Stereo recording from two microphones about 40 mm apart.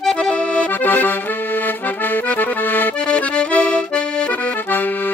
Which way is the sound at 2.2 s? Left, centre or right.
Left.